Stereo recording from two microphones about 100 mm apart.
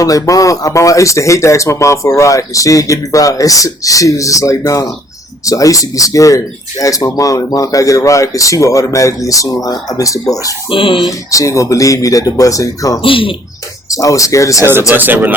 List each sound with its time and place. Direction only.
0.0 s speech: 35° left (ahead or behind)
10.7 s speech: 60° left (ahead or behind)
11.3 s speech: 35° left (ahead or behind)
13.0 s speech: 60° left (ahead or behind)
13.9 s speech: 35° left (ahead or behind)
14.6 s speech: 25° right (ahead or behind)